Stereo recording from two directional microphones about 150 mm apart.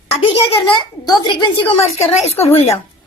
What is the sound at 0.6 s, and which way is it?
Speech, 30° left (ahead or behind).